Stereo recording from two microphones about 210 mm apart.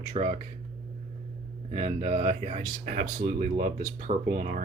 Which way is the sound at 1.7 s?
35° right (ahead or behind).